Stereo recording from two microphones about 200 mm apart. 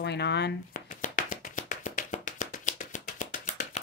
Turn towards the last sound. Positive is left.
turn(degrees=40)  # may be behind; listen again after turning